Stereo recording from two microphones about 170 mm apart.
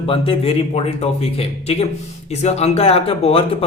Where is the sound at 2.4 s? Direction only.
40° left (ahead or behind).